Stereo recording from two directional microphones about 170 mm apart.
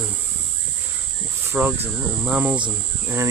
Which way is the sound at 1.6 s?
10° right (ahead or behind).